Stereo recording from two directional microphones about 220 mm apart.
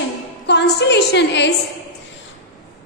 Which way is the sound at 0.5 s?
50° left (ahead or behind).